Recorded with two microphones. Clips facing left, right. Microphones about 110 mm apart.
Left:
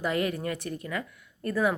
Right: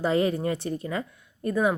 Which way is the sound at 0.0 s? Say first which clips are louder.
Right 5 dB; 25° right (ahead or behind).